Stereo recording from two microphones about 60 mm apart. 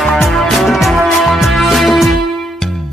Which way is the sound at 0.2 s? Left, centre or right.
Centre.